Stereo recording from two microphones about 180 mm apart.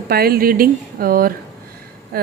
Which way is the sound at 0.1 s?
55° right (ahead or behind).